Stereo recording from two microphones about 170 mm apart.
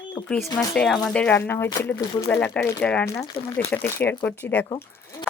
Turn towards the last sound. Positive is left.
turn(degrees=10)  # may be behind; listen again after turning